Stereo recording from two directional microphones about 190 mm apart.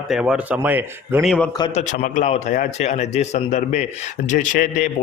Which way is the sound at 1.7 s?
40° left (ahead or behind).